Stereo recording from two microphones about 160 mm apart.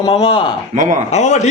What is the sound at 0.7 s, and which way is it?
Speech, 50° right (ahead or behind).